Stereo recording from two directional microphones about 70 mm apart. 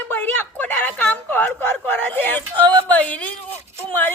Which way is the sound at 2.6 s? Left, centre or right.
Left.